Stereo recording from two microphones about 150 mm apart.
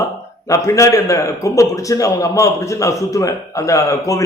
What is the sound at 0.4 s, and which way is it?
A man's voice, 20° left (ahead or behind).